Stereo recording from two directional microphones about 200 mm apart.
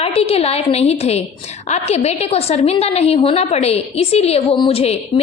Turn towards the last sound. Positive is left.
turn(degrees=30)  # may be behind; listen again after turning